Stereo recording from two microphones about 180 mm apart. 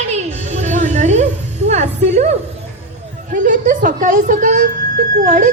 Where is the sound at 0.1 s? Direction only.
40° right (ahead or behind).